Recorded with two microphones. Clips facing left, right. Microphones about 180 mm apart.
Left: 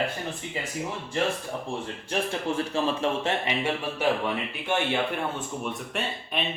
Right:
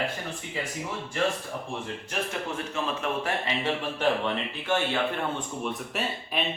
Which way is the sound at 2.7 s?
30° left (ahead or behind).